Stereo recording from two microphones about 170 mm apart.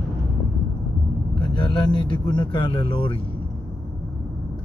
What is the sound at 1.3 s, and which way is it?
Speech, 25° left (ahead or behind).